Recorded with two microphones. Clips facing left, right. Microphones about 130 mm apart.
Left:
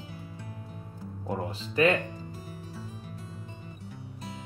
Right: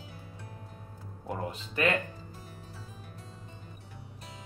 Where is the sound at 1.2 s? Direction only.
25° left (ahead or behind).